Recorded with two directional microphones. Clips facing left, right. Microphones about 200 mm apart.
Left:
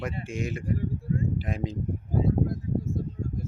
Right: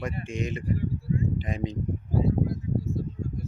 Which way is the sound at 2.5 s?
50° left (ahead or behind).